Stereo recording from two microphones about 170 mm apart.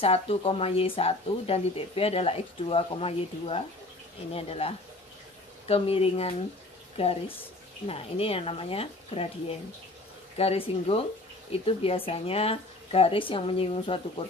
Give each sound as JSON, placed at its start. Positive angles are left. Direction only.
{"t": 0.0, "sound": "speech", "side_deg": 35}
{"t": 10.3, "sound": "speech", "side_deg": 35}